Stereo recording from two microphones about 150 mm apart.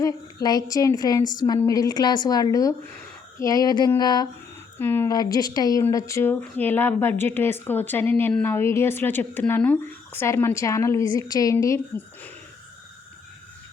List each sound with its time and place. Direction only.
0.0 s a woman's voice: 25° left (ahead or behind)
4.8 s speech: 15° left (ahead or behind)
5.1 s a woman's voice: 25° left (ahead or behind)